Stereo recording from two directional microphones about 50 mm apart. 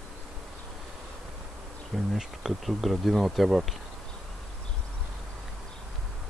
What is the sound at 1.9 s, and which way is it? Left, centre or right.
Speech, centre.